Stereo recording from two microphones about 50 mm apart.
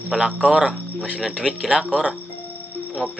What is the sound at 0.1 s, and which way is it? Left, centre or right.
Speech, centre.